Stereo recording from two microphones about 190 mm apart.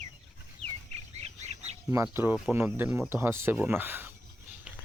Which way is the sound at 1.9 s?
15° right (ahead or behind).